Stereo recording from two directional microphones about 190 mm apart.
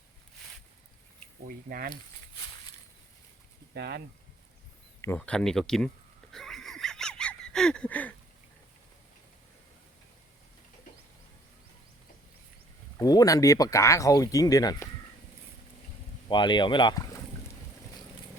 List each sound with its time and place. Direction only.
1.5 s speech: 50° right (ahead or behind)
3.8 s speech: 60° right (ahead or behind)
4.9 s speech: 10° left (ahead or behind)
6.3 s a sound: centre (ahead or behind)
13.0 s speech: 20° left (ahead or behind)
16.3 s speech: 25° left (ahead or behind)